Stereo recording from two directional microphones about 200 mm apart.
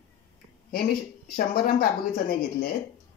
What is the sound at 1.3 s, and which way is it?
Speech, 45° left (ahead or behind).